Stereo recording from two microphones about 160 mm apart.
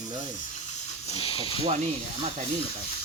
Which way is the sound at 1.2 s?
35° left (ahead or behind).